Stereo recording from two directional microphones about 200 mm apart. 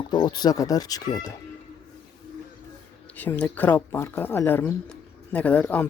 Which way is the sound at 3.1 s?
10° left (ahead or behind).